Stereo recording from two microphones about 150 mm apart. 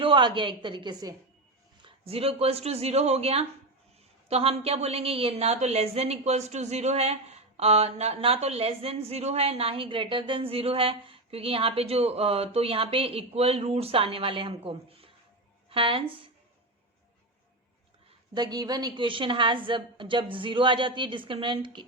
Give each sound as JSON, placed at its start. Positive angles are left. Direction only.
{"t": 0.0, "sound": "a woman's voice", "side_deg": -35}
{"t": 1.8, "sound": "a woman's voice", "side_deg": -40}
{"t": 18.3, "sound": "a woman's voice", "side_deg": -25}